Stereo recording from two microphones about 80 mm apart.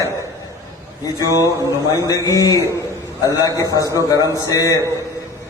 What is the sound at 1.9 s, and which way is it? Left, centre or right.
A man's voice, left.